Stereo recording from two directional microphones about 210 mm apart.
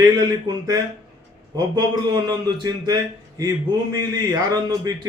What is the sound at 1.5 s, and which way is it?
A man's voice, 20° right (ahead or behind).